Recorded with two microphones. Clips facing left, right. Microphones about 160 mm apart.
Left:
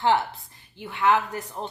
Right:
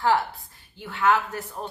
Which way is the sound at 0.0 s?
20° left (ahead or behind).